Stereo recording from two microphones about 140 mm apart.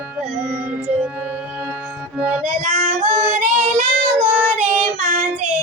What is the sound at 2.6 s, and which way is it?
Female singing, 60° right (ahead or behind).